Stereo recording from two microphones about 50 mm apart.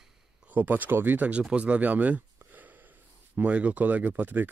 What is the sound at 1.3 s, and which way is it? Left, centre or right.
Speech, right.